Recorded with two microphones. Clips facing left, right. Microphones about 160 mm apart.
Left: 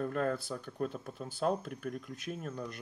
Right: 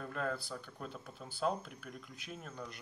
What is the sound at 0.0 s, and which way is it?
Speech, 55° left (ahead or behind).